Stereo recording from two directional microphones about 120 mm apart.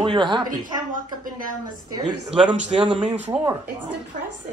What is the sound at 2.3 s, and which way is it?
Speech, 10° right (ahead or behind).